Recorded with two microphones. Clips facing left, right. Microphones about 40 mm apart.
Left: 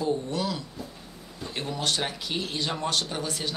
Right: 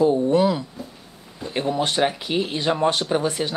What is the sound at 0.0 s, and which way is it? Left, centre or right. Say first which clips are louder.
Speech: right 11 dB; right.